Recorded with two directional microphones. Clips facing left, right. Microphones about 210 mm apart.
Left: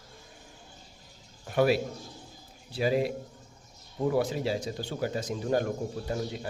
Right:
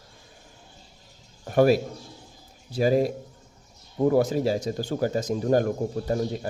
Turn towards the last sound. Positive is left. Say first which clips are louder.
# right 6 dB
turn(degrees=-40)  # may be behind; listen again after turning